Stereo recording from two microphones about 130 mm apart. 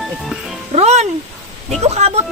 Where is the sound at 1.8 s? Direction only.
55° right (ahead or behind).